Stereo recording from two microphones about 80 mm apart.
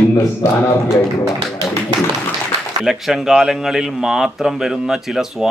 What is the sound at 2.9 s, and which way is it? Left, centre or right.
A man's voice, centre.